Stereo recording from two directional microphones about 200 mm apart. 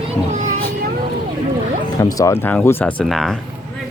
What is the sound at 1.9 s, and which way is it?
Speech, 15° left (ahead or behind).